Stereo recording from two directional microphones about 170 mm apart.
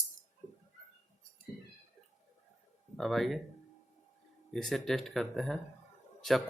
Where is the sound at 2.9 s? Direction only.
Centre (ahead or behind).